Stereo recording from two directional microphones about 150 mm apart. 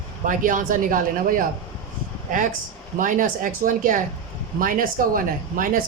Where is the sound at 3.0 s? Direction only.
65° right (ahead or behind).